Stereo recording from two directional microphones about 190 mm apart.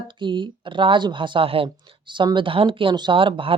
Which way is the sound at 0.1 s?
25° right (ahead or behind).